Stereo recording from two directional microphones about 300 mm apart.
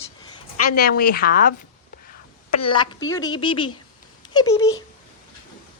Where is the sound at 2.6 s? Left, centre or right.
Centre.